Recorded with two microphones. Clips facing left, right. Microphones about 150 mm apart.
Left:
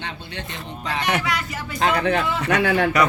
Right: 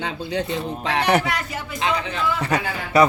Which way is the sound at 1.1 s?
45° right (ahead or behind).